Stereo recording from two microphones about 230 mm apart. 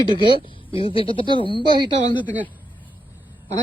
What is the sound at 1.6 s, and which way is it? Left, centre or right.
Speech, centre.